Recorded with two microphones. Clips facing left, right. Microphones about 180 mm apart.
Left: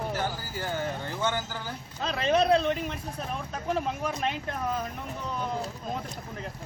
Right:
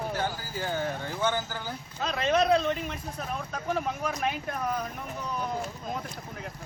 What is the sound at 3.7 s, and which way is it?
Speech, centre (ahead or behind).